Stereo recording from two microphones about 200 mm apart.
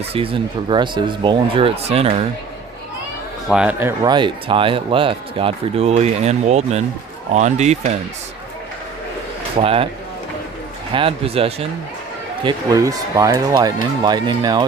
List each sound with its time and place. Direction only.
0.1 s speech: 25° right (ahead or behind)
3.5 s speech: 5° right (ahead or behind)
4.1 s speech: 25° right (ahead or behind)
9.6 s speech: 25° right (ahead or behind)
10.9 s speech: 30° right (ahead or behind)